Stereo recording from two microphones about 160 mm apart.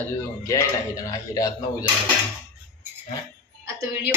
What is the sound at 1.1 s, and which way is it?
Speech, 20° left (ahead or behind).